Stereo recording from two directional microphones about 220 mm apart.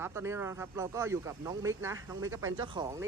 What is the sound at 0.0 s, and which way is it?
Speech, 10° right (ahead or behind).